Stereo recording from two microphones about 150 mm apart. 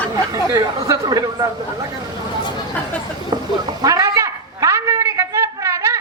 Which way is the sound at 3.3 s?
25° right (ahead or behind).